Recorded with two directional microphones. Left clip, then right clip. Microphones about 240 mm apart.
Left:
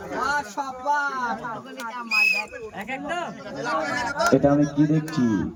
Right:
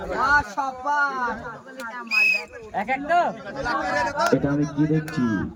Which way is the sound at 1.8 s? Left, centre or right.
Left.